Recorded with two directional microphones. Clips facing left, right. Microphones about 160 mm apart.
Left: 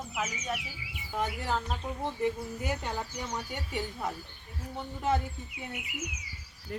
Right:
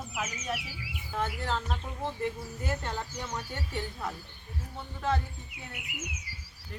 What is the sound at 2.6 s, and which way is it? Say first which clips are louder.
A woman's voice: right 1 dB; 15° left (ahead or behind).